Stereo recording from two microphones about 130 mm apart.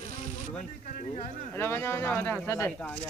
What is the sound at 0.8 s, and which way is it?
Speech, 65° left (ahead or behind).